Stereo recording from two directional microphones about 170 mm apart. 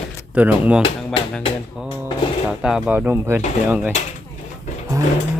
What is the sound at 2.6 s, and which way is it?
Speech, 5° right (ahead or behind).